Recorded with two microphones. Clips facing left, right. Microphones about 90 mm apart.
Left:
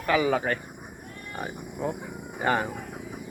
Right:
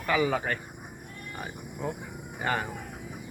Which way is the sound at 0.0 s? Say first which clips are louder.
Left 3 dB; 5° left (ahead or behind).